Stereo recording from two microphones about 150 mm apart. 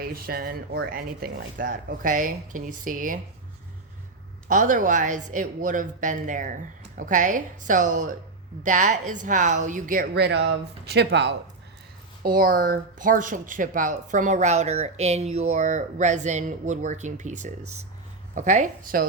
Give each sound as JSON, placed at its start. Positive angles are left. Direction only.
{"t": 0.0, "sound": "speech", "side_deg": -85}
{"t": 4.4, "sound": "speech", "side_deg": -60}
{"t": 12.2, "sound": "speech", "side_deg": -70}